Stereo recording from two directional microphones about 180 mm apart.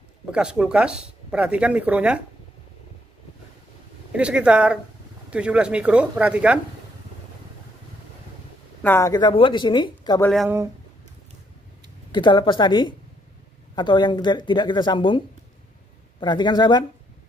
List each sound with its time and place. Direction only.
0.3 s speech: 5° right (ahead or behind)
4.1 s speech: 5° right (ahead or behind)
8.8 s speech: 15° left (ahead or behind)
12.1 s speech: 25° left (ahead or behind)